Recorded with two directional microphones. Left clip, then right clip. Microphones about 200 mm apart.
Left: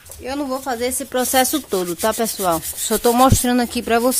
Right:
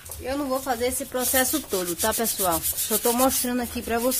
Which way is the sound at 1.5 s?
40° left (ahead or behind).